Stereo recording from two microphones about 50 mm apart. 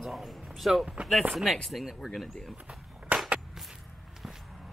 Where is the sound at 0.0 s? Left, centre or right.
Centre.